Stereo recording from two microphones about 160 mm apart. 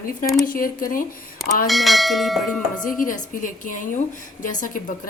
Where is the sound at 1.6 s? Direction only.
Centre (ahead or behind).